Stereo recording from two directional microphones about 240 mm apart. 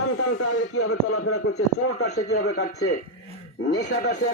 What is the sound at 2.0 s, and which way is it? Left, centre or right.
A man's voice, left.